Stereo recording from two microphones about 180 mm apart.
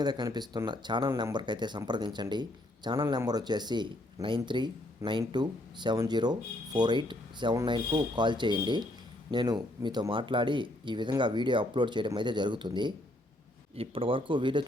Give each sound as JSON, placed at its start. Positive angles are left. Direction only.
{"t": 0.0, "sound": "speech", "side_deg": -25}